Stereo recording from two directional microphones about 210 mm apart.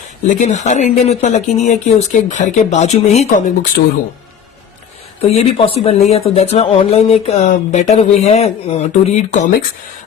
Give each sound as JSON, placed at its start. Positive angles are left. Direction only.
{"t": 0.3, "sound": "speech", "side_deg": 35}
{"t": 5.2, "sound": "speech", "side_deg": 30}